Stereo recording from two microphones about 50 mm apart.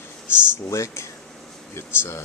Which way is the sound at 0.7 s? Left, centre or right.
Left.